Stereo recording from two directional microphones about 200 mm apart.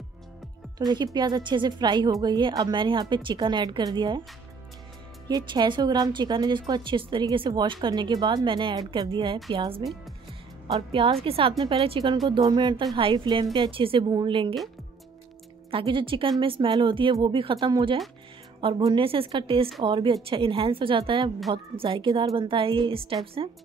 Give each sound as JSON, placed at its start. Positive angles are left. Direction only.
{"t": 0.7, "sound": "speech", "side_deg": -20}
{"t": 5.3, "sound": "speech", "side_deg": -20}
{"t": 15.7, "sound": "speech", "side_deg": -25}